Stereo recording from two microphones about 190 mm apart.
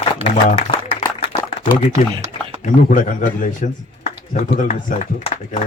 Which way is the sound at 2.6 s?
45° left (ahead or behind).